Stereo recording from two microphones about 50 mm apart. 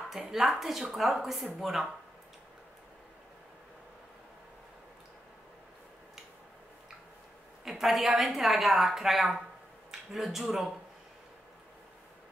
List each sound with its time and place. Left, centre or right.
0.1 s a woman's voice: centre
7.6 s a woman's voice: centre